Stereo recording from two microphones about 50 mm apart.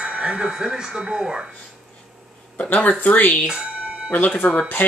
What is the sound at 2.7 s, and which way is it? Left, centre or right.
Speech, left.